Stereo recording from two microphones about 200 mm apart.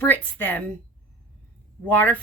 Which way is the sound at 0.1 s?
10° left (ahead or behind).